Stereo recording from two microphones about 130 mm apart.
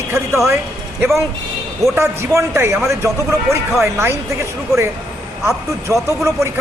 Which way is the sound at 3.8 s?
20° right (ahead or behind).